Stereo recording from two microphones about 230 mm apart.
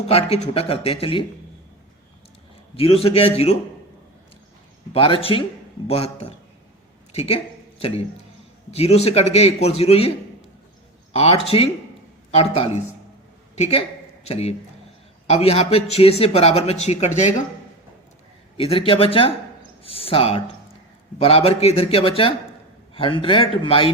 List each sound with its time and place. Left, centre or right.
0.1 s a man's voice: left
2.7 s a man's voice: left
4.9 s a man's voice: left
7.1 s a sound: left
8.7 s a man's voice: left
11.1 s a man's voice: left
18.5 s a man's voice: left